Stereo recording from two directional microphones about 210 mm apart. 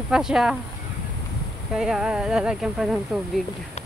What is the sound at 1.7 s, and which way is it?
Speech, centre (ahead or behind).